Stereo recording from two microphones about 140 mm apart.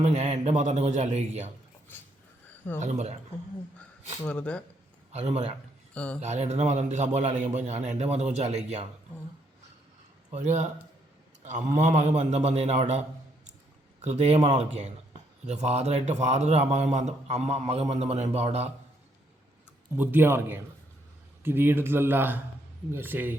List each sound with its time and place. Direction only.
0.0 s a man's voice: 50° right (ahead or behind)
2.8 s a man's voice: 55° right (ahead or behind)
4.3 s speech: 10° left (ahead or behind)
5.1 s a man's voice: 50° right (ahead or behind)
5.9 s speech: 10° left (ahead or behind)
6.1 s a man's voice: 55° right (ahead or behind)
10.3 s a man's voice: 60° right (ahead or behind)
14.0 s a man's voice: 50° right (ahead or behind)
20.0 s speech: 15° right (ahead or behind)